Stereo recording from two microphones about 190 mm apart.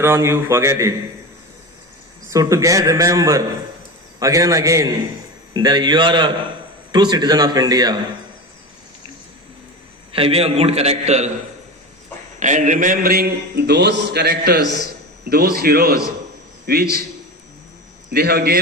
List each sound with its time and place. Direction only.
0.0 s a man's voice: 15° right (ahead or behind)
2.3 s a man's voice: 15° right (ahead or behind)
10.2 s a man's voice: 30° right (ahead or behind)
12.4 s a man's voice: 40° right (ahead or behind)
18.1 s a man's voice: 55° right (ahead or behind)